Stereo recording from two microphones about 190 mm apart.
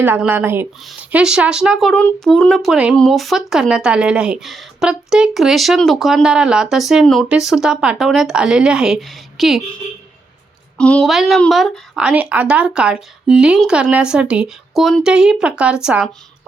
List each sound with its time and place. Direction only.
0.0 s speech: 10° right (ahead or behind)
10.8 s speech: 5° left (ahead or behind)